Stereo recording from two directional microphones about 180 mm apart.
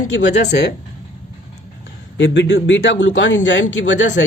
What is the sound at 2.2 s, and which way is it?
A woman's voice, 90° left.